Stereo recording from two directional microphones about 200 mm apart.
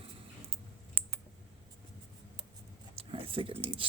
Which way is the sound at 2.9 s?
25° right (ahead or behind).